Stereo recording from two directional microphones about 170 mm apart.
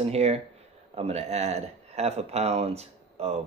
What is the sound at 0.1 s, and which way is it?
Speech, 40° right (ahead or behind).